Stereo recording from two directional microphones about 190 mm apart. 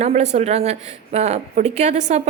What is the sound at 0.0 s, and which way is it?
A woman's voice, 35° right (ahead or behind).